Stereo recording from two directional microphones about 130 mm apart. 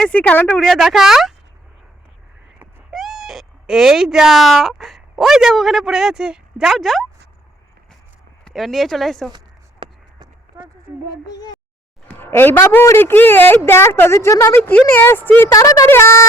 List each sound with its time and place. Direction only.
0.0 s speech: 10° left (ahead or behind)
2.9 s speech: centre (ahead or behind)
8.4 s speech: centre (ahead or behind)
9.8 s a sound: 35° right (ahead or behind)
10.9 s speech: 15° right (ahead or behind)
11.3 s a sound: 30° left (ahead or behind)
12.0 s speech: 15° left (ahead or behind)
15.5 s speech: 25° left (ahead or behind)